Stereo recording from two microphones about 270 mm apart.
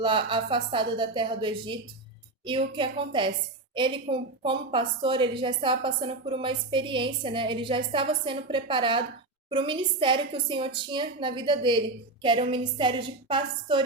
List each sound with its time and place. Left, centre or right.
0.0 s a woman's voice: centre